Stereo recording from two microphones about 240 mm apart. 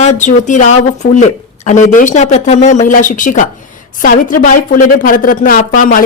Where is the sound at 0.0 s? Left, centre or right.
Left.